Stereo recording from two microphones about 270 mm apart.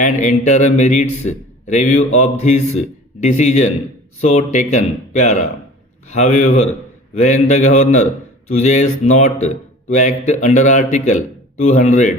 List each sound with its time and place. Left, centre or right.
0.0 s a man's voice: left